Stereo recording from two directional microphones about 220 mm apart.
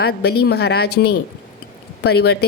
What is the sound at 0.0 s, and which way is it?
Speech, 45° left (ahead or behind).